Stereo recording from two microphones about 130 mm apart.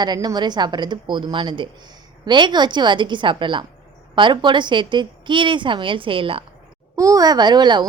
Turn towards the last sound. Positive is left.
turn(degrees=-35)  # may be behind; listen again after turning